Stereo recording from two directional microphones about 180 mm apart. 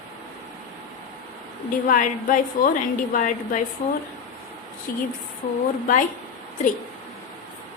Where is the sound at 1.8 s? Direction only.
45° left (ahead or behind).